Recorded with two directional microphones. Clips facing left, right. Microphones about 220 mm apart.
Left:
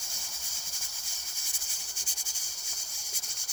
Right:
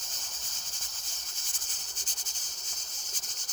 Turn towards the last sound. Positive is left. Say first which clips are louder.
# right 1 dB
turn(degrees=10)  # may be behind; listen again after turning